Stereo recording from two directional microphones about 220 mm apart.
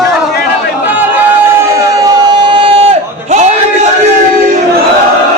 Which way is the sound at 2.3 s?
20° right (ahead or behind).